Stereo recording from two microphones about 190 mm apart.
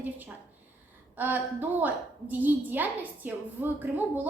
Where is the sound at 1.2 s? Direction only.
10° right (ahead or behind).